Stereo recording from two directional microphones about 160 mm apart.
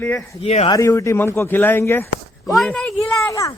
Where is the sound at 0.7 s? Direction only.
20° left (ahead or behind).